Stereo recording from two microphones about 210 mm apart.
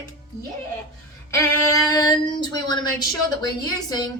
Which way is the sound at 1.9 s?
20° left (ahead or behind).